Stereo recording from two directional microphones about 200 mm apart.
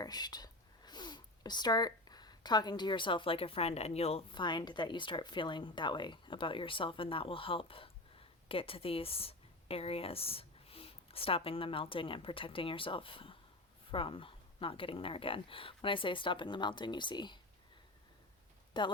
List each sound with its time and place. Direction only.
0.0 s a woman's voice: 20° left (ahead or behind)
18.8 s a woman's voice: 25° left (ahead or behind)